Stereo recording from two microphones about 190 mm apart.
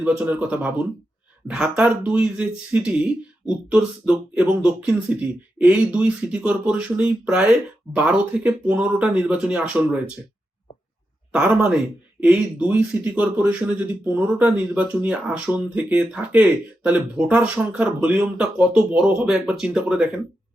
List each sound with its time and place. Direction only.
0.0 s speech: 5° right (ahead or behind)
11.3 s speech: 5° right (ahead or behind)